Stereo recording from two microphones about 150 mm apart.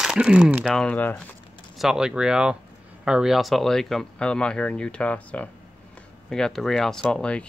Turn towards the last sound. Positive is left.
turn(degrees=5)  # may be behind; listen again after turning